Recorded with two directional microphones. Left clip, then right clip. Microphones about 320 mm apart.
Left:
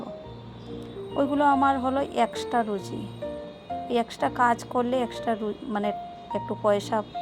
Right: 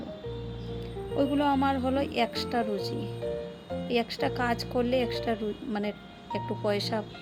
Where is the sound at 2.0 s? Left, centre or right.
Left.